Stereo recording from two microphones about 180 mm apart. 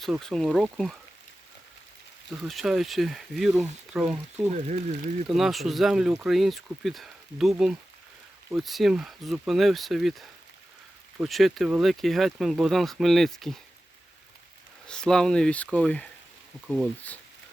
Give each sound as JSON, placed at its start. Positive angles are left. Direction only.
{"t": 0.0, "sound": "speech", "side_deg": 0}
{"t": 2.5, "sound": "speech", "side_deg": 0}
{"t": 4.5, "sound": "speech", "side_deg": -40}
{"t": 5.3, "sound": "speech", "side_deg": 0}
{"t": 14.8, "sound": "speech", "side_deg": 5}